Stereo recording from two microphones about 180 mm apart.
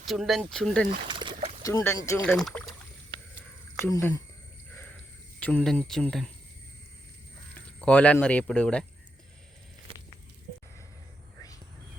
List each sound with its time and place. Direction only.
0.1 s speech: centre (ahead or behind)
1.0 s a sound: 25° right (ahead or behind)
1.6 s speech: 15° left (ahead or behind)
2.3 s speech: 5° left (ahead or behind)
3.8 s speech: 20° left (ahead or behind)
4.7 s a sound: 10° left (ahead or behind)
5.4 s speech: 10° left (ahead or behind)
7.8 s speech: 5° left (ahead or behind)